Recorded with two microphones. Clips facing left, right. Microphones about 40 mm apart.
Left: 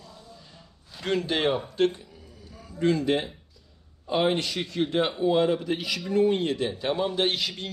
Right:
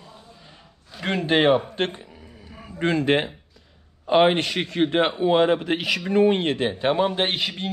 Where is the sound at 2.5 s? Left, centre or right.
Right.